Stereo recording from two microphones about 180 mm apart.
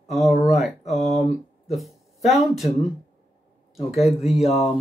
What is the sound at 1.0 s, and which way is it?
Speech, 35° left (ahead or behind).